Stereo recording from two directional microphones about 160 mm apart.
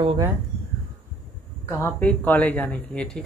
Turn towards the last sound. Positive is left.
turn(degrees=5)  # may be behind; listen again after turning